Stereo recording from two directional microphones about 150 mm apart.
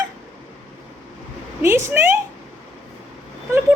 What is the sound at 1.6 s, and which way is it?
Speech, 15° right (ahead or behind).